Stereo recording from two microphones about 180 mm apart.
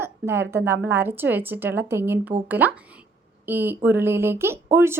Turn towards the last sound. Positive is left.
turn(degrees=-15)  # may be behind; listen again after turning